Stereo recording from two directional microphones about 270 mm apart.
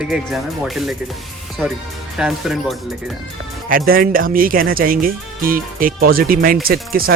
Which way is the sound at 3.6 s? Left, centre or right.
Right.